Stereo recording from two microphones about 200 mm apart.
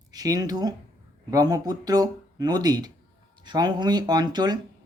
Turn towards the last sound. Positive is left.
turn(degrees=-20)  # may be behind; listen again after turning